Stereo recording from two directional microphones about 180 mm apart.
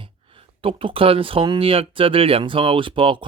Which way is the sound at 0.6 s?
30° right (ahead or behind).